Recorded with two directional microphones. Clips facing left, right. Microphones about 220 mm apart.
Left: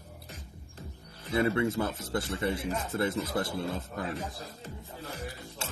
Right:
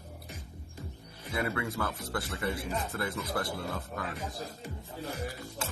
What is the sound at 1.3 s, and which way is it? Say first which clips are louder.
Speech: left 6 dB; 30° left (ahead or behind).